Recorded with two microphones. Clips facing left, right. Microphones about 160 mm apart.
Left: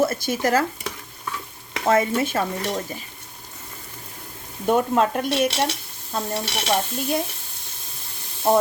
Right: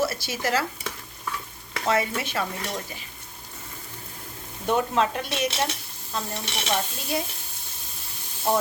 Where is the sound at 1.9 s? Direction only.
45° left (ahead or behind).